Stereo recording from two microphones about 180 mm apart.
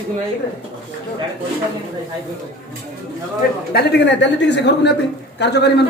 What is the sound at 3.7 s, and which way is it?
Speech, 70° left (ahead or behind).